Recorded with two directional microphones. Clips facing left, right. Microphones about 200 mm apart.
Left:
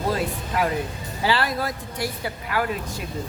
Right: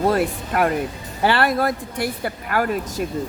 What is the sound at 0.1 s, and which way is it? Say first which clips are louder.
Speech: right 5 dB; 60° right (ahead or behind).